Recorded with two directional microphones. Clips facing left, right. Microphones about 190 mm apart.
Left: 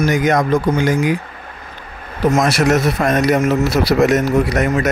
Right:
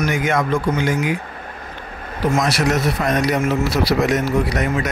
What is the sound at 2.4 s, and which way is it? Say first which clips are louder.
Speech: left 4 dB; 50° left (ahead or behind).